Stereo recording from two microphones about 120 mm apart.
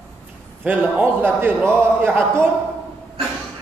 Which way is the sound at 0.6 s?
15° right (ahead or behind).